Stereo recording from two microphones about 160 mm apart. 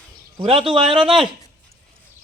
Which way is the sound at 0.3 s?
35° right (ahead or behind).